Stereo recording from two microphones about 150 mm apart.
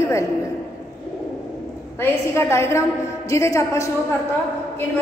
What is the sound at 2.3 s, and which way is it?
A woman's voice, 20° left (ahead or behind).